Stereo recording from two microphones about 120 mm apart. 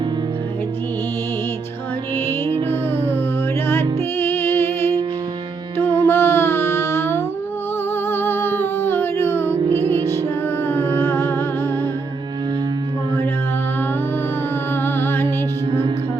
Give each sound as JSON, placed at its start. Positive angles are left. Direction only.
{"t": 2.6, "sound": "music", "side_deg": 20}
{"t": 14.8, "sound": "music", "side_deg": 20}